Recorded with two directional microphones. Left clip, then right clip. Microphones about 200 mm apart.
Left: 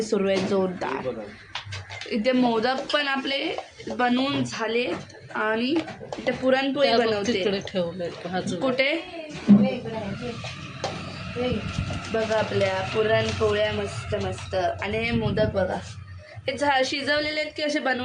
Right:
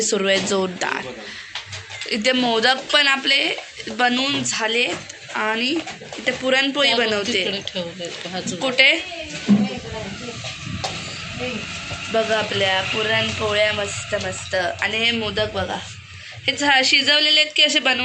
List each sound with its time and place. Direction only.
0.0 s a woman's voice: centre (ahead or behind)
2.0 s a woman's voice: centre (ahead or behind)
7.4 s a woman's voice: 35° left (ahead or behind)
8.6 s a woman's voice: 5° left (ahead or behind)
12.1 s a woman's voice: 10° right (ahead or behind)